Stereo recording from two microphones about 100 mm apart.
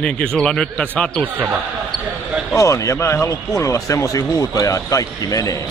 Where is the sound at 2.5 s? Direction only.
35° left (ahead or behind).